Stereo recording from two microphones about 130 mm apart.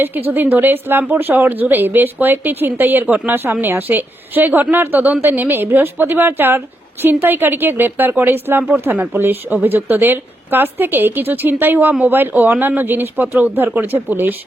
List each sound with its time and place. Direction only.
0.3 s speech: 15° right (ahead or behind)